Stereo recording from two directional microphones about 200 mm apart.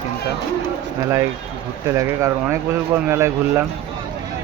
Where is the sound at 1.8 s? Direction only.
15° right (ahead or behind).